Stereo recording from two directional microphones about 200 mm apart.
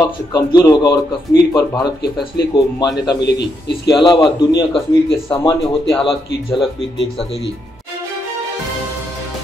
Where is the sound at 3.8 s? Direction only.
20° left (ahead or behind).